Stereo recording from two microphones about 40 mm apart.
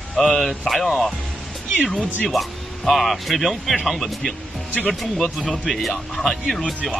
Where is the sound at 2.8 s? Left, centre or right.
Centre.